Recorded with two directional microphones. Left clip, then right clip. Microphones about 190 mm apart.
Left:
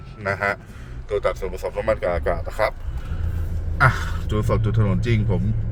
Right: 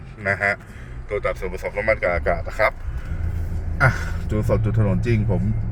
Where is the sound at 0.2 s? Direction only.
5° left (ahead or behind).